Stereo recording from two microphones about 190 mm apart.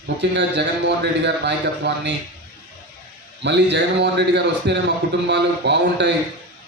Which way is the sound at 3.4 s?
65° right (ahead or behind).